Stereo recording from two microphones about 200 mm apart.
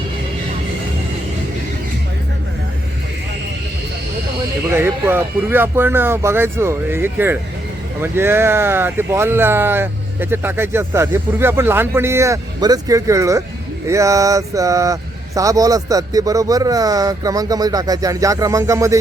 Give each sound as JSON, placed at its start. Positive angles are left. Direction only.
{"t": 4.7, "sound": "speech", "side_deg": -10}